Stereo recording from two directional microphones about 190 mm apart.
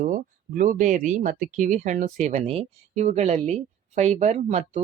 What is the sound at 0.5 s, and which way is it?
Speech, 45° right (ahead or behind).